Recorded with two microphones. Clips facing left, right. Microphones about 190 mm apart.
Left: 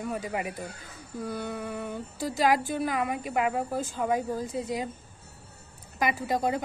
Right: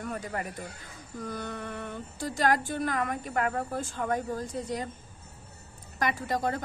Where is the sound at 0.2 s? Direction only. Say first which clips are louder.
Left 3 dB; 10° left (ahead or behind).